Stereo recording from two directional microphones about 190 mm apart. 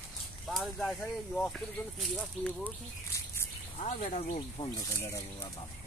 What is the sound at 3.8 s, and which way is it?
Speech, 35° left (ahead or behind).